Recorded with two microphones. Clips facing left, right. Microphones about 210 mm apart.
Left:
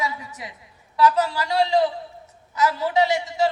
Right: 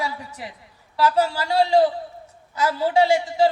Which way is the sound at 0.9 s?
30° right (ahead or behind).